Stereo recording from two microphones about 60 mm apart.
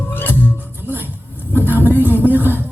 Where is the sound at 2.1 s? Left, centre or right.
Right.